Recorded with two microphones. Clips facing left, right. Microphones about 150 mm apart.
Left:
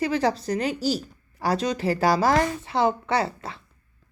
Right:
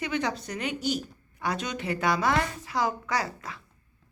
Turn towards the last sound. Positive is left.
turn(degrees=30)  # may be behind; listen again after turning